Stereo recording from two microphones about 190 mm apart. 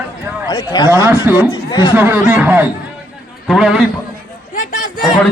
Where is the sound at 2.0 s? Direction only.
5° right (ahead or behind).